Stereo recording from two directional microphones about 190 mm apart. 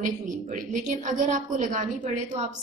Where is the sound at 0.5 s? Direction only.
40° right (ahead or behind).